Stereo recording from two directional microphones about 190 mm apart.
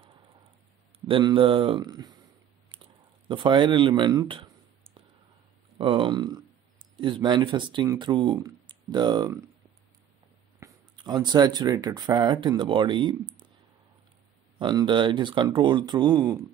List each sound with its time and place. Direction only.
1.0 s speech: 25° right (ahead or behind)
5.8 s speech: 25° right (ahead or behind)
10.6 s speech: 20° right (ahead or behind)
14.6 s speech: 25° right (ahead or behind)